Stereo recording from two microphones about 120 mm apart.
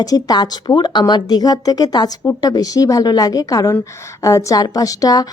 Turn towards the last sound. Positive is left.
turn(degrees=30)  # may be behind; listen again after turning